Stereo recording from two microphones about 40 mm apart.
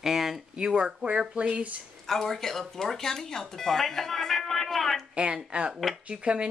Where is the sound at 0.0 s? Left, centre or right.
Centre.